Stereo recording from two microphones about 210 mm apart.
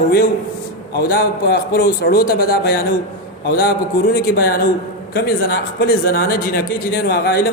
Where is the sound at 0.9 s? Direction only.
45° left (ahead or behind).